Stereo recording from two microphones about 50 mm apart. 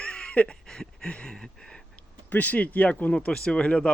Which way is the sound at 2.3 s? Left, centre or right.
Left.